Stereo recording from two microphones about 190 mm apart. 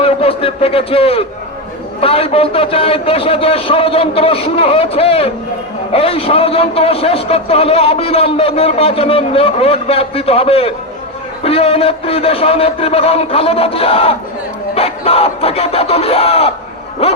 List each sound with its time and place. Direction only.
0.0 s a man's voice: 30° left (ahead or behind)